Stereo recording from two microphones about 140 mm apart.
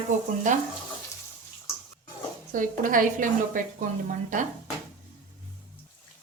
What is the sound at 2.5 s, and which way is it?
A woman's voice, 70° right (ahead or behind).